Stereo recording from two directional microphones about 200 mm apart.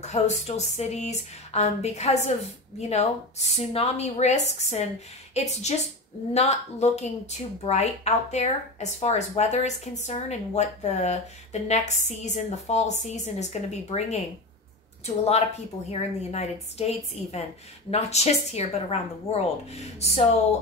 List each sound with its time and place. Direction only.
0.0 s a woman's voice: 35° left (ahead or behind)